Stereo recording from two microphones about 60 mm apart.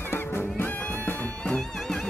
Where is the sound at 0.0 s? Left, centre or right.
Left.